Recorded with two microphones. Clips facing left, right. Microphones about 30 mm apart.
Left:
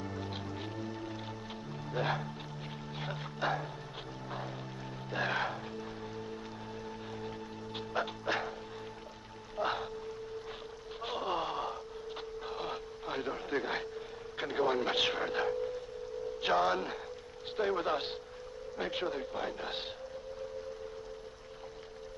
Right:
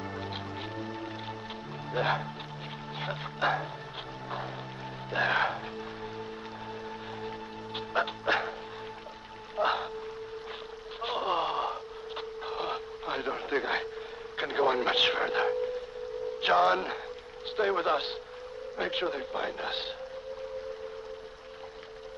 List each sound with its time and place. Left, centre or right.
0.0 s music: right
1.9 s speech: right
5.1 s speech: right
7.2 s music: right
9.6 s music: right
11.0 s a sound: right
14.3 s a man's voice: right